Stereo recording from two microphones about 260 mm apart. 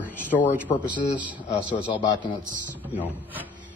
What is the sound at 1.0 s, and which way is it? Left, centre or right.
Speech, centre.